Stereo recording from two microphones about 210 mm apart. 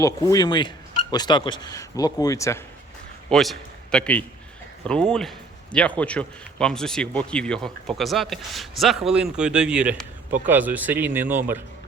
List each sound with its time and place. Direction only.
0.0 s speech: 15° left (ahead or behind)
3.2 s a man's voice: centre (ahead or behind)